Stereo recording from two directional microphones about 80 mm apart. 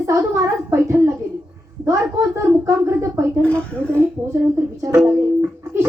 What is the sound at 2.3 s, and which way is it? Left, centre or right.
Speech, right.